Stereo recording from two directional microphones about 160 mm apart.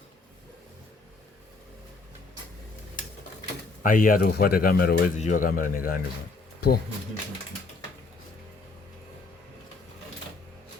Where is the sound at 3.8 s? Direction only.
60° left (ahead or behind).